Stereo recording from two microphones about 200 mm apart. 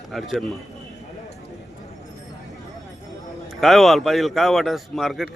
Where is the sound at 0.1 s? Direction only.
Centre (ahead or behind).